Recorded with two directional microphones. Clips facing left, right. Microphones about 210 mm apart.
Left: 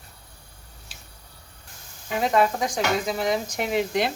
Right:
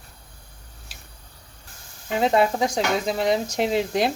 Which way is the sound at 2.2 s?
30° right (ahead or behind).